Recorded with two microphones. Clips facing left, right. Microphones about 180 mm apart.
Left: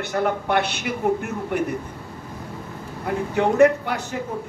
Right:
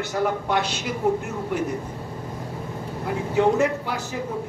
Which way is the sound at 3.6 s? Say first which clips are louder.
Left 7 dB; 60° left (ahead or behind).